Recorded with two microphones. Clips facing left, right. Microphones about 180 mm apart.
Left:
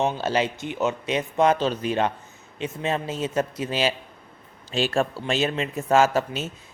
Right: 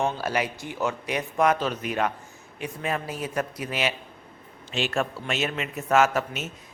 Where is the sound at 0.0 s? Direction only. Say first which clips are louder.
Left 3 dB; 25° left (ahead or behind).